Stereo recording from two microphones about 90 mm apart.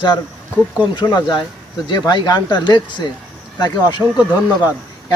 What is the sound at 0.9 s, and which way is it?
Speech, 55° left (ahead or behind).